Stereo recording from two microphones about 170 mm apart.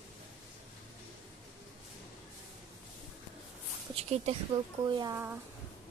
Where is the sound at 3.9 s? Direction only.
35° right (ahead or behind).